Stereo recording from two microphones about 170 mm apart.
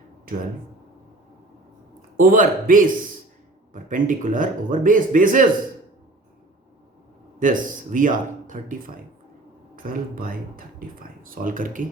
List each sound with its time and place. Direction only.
0.3 s speech: 60° right (ahead or behind)
2.0 s a man's voice: 55° right (ahead or behind)
7.3 s speech: 50° right (ahead or behind)